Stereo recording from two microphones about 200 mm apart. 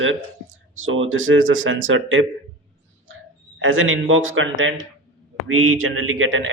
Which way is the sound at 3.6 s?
75° right (ahead or behind).